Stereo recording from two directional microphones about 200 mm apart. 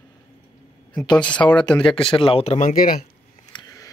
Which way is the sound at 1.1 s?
5° left (ahead or behind).